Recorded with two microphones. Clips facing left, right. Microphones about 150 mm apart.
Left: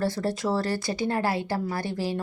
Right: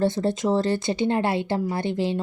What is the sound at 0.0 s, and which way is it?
A woman's voice, 20° right (ahead or behind).